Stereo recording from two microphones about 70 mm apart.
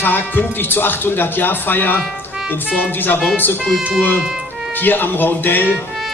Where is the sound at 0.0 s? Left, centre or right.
Left.